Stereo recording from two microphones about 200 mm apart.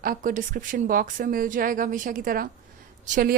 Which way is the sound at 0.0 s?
45° right (ahead or behind).